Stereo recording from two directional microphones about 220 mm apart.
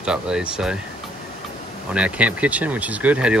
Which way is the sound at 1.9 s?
5° right (ahead or behind).